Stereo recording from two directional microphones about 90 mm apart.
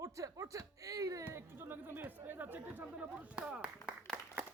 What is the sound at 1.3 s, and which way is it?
Speech, 25° right (ahead or behind).